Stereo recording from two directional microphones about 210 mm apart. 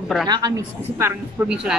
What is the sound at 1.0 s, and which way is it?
Speech, 5° right (ahead or behind).